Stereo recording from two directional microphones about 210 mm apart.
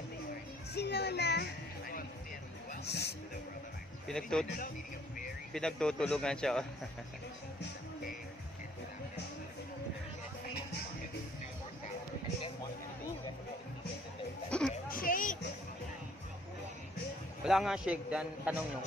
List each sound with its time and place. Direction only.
0.7 s music: 50° left (ahead or behind)
2.7 s speech: 50° left (ahead or behind)
4.1 s a man's voice: 5° left (ahead or behind)
5.5 s a man's voice: 5° left (ahead or behind)
14.5 s a sound: 5° left (ahead or behind)
14.9 s music: 40° left (ahead or behind)
17.5 s a man's voice: centre (ahead or behind)